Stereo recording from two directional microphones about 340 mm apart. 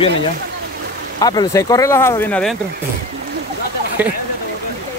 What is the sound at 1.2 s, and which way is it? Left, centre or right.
Speech, centre.